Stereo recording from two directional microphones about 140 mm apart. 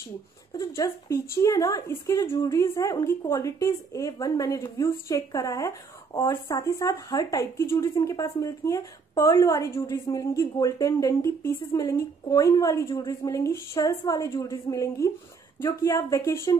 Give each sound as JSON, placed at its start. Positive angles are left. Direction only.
{"t": 0.5, "sound": "a woman's voice", "side_deg": 25}